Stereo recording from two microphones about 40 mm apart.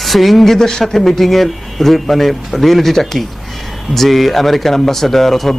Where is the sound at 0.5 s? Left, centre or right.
Centre.